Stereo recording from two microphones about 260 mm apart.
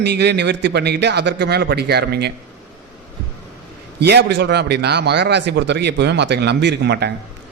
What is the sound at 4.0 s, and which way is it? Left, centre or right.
A man's voice, right.